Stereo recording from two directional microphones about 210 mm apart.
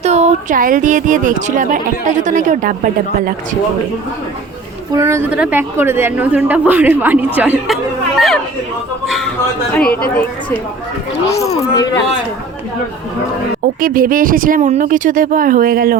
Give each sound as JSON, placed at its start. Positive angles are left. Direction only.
{"t": 0.0, "sound": "speech", "side_deg": -30}
{"t": 4.9, "sound": "a woman's voice", "side_deg": -15}
{"t": 9.0, "sound": "speech", "side_deg": 0}
{"t": 11.3, "sound": "speech", "side_deg": 30}
{"t": 11.7, "sound": "speech", "side_deg": 15}
{"t": 13.8, "sound": "speech", "side_deg": -40}